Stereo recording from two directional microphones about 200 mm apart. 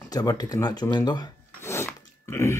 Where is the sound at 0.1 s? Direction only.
20° left (ahead or behind).